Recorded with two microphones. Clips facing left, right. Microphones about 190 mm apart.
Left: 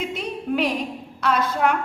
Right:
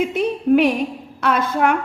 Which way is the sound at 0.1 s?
55° right (ahead or behind).